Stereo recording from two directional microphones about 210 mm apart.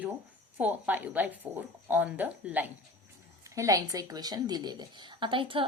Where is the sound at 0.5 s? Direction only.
10° right (ahead or behind).